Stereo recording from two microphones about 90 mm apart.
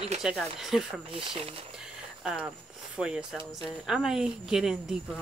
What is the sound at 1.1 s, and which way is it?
Speech, 85° right.